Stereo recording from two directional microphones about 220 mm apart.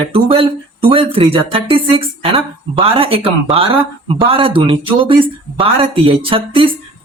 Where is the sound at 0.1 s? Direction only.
25° right (ahead or behind).